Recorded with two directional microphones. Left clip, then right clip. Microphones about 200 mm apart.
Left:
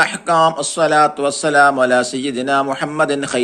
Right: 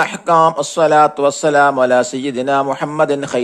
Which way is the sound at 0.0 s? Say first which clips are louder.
Right 1 dB; 45° right (ahead or behind).